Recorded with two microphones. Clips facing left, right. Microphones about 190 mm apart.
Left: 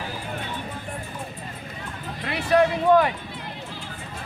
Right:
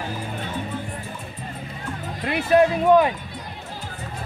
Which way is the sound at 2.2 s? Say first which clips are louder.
Right 3 dB; 20° right (ahead or behind).